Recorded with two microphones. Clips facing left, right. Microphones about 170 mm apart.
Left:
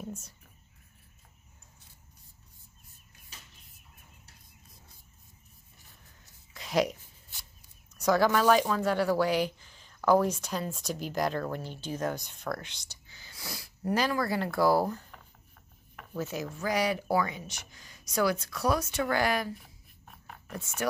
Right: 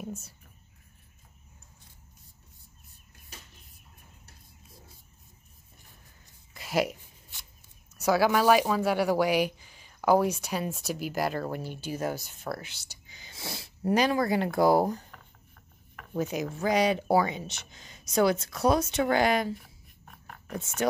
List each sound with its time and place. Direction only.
6.5 s a sound: 5° right (ahead or behind)
7.9 s speech: 10° right (ahead or behind)
16.1 s speech: 15° right (ahead or behind)
20.5 s speech: 20° right (ahead or behind)